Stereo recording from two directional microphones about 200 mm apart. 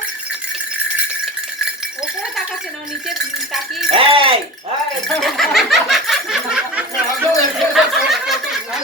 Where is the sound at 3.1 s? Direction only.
Centre (ahead or behind).